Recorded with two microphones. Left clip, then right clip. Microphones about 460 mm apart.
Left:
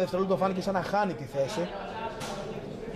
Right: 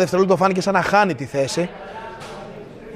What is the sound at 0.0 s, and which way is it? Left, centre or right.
Speech, right.